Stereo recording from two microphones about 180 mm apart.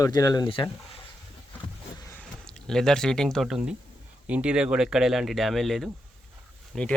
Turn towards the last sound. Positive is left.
turn(degrees=0)  # may be behind; listen again after turning